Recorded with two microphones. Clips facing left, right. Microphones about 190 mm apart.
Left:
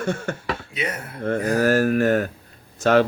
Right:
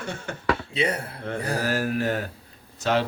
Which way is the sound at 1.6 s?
50° left (ahead or behind).